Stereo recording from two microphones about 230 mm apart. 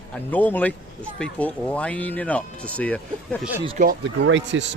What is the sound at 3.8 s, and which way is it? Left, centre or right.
Speech, right.